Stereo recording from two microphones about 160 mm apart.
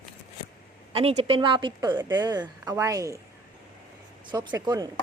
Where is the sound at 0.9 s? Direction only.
40° right (ahead or behind); by 3.2 s 20° right (ahead or behind).